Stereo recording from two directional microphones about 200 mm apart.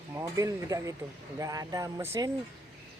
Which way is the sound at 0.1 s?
15° right (ahead or behind).